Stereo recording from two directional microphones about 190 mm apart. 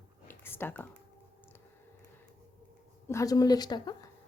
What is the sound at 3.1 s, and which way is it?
A woman's voice, 15° left (ahead or behind).